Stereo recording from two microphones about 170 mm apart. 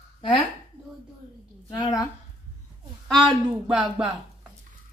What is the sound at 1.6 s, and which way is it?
Speech, 25° left (ahead or behind).